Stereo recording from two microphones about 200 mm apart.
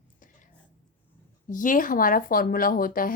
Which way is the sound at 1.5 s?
40° left (ahead or behind).